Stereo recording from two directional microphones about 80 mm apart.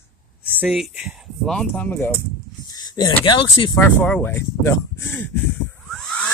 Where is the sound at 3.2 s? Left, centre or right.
Left.